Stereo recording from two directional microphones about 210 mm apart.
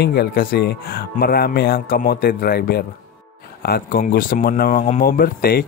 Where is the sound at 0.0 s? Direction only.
50° left (ahead or behind).